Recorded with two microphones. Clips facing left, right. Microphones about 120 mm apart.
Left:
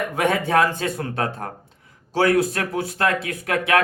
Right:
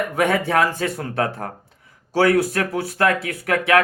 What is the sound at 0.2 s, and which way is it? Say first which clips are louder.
Speech: even; 25° left (ahead or behind).